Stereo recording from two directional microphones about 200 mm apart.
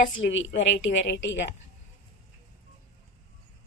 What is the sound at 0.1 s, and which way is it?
A woman's voice, 70° left (ahead or behind).